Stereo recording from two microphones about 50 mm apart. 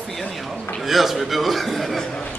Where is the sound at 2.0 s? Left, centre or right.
Centre.